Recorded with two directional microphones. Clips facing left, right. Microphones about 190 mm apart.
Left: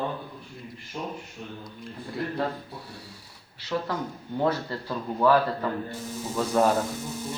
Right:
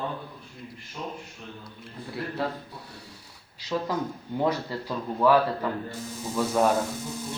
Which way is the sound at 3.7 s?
20° right (ahead or behind).